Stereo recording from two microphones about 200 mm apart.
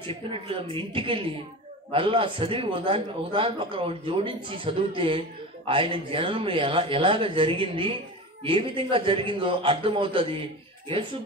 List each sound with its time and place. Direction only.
0.0 s speech: 25° right (ahead or behind)